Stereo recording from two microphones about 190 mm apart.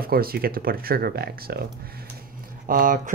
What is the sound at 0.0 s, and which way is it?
Speech, 50° right (ahead or behind).